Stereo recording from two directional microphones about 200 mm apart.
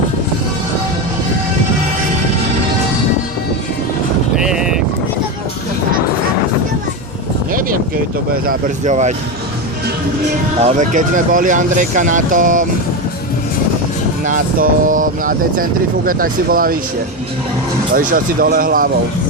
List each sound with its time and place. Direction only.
4.4 s vehicle: 5° right (ahead or behind)
8.3 s speech: 45° right (ahead or behind)
10.6 s speech: 35° right (ahead or behind)
14.3 s speech: 40° right (ahead or behind)
17.9 s speech: 45° right (ahead or behind)